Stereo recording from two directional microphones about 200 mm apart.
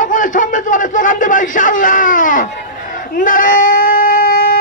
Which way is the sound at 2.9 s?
45° left (ahead or behind).